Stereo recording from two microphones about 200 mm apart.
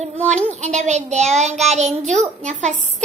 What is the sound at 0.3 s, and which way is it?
Child singing, 35° right (ahead or behind).